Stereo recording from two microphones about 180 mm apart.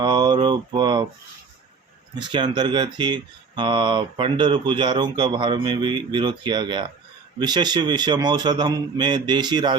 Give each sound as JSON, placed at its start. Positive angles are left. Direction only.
{"t": 0.0, "sound": "mantra", "side_deg": -25}
{"t": 2.1, "sound": "speech", "side_deg": -25}